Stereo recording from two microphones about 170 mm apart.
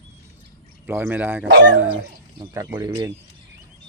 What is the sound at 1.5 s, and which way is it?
Speech, 85° right.